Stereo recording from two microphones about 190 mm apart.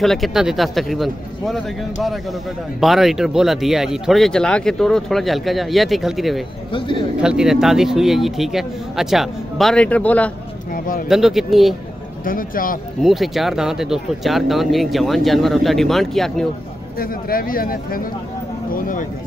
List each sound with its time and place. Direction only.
0.0 s speech: centre (ahead or behind)
6.7 s speech: 25° left (ahead or behind)
7.2 s speech: 5° right (ahead or behind)
10.7 s speech: 45° left (ahead or behind)
11.1 s speech: centre (ahead or behind)
12.3 s speech: 50° left (ahead or behind)
13.0 s speech: centre (ahead or behind)
17.0 s speech: 50° left (ahead or behind)